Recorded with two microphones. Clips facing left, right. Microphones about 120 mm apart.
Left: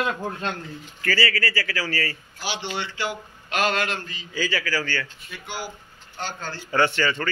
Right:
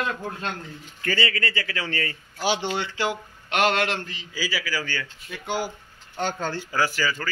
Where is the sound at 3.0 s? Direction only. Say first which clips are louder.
Right 3 dB; 85° right.